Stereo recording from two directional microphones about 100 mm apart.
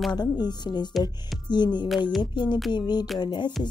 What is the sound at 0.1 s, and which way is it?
Music, 45° left (ahead or behind).